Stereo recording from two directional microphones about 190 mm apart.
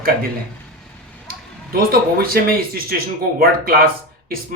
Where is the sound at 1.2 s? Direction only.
50° right (ahead or behind).